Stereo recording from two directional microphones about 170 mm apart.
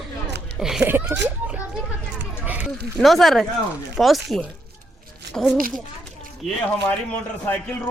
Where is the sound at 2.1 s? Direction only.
10° right (ahead or behind).